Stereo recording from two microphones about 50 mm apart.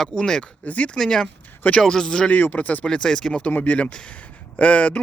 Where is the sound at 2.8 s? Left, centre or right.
Centre.